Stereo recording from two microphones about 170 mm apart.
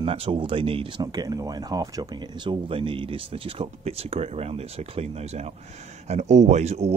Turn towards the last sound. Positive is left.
turn(degrees=-40)  # may be behind; listen again after turning